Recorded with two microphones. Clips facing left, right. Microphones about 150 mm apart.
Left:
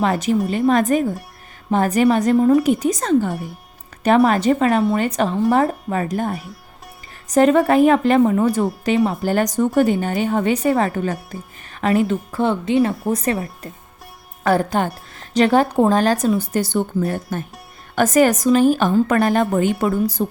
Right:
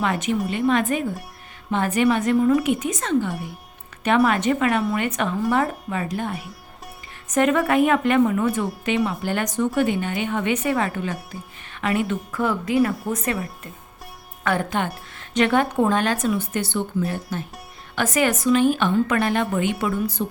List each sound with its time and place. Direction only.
0.0 s a woman's voice: 35° left (ahead or behind)